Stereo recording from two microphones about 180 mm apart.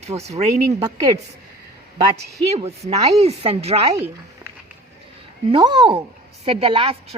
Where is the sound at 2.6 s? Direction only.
35° right (ahead or behind).